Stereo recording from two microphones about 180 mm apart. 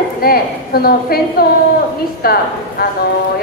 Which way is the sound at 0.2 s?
55° left (ahead or behind).